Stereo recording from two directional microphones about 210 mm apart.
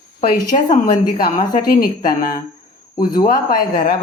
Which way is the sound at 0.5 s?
30° left (ahead or behind).